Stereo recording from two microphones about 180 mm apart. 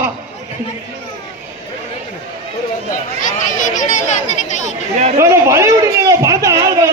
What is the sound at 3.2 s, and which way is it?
Speech, 45° left (ahead or behind).